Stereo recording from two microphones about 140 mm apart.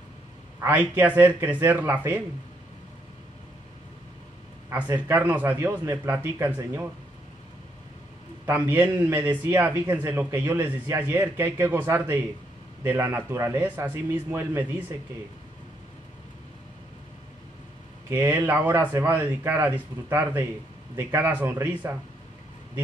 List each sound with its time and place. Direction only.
0.6 s speech: 15° right (ahead or behind)
4.6 s speech: 15° right (ahead or behind)
8.5 s speech: 15° right (ahead or behind)
18.1 s speech: 15° right (ahead or behind)